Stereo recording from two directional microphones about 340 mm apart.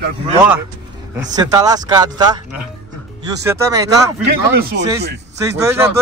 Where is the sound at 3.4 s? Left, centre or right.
Centre.